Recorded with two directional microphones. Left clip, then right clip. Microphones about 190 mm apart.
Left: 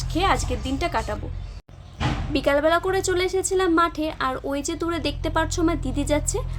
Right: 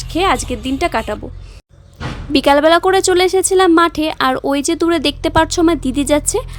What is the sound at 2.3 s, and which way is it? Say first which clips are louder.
A woman's voice: right 10 dB; 50° right (ahead or behind).